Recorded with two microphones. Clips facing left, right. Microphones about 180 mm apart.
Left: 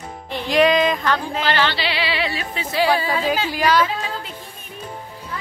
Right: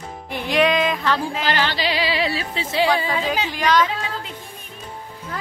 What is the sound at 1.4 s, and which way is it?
Speech, 40° right (ahead or behind).